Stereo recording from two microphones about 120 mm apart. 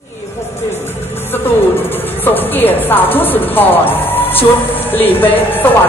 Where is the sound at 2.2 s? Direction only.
15° left (ahead or behind).